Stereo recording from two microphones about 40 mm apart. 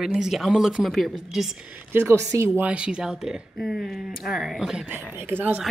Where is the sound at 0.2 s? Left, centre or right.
Centre.